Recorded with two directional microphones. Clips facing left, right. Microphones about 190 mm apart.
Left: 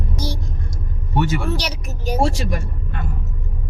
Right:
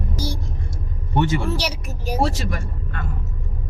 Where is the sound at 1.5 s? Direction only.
5° right (ahead or behind).